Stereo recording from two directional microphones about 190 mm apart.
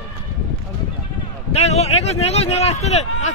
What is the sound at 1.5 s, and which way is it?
A man's voice, 35° left (ahead or behind).